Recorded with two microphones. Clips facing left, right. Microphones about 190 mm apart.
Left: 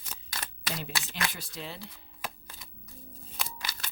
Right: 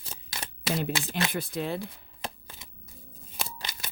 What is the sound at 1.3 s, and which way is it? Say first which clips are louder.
Speech: right 11 dB; 55° right (ahead or behind).